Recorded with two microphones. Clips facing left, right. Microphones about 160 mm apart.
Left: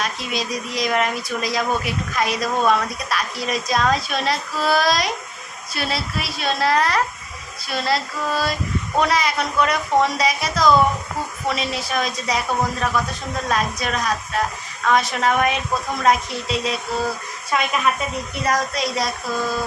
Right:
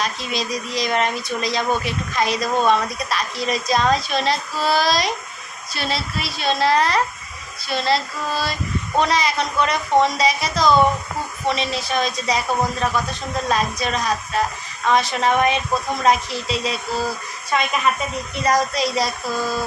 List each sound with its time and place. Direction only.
0.0 s speech: centre (ahead or behind)
18.4 s speech: centre (ahead or behind)